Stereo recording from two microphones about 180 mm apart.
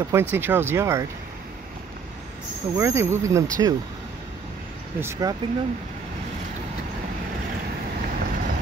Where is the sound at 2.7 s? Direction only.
15° right (ahead or behind).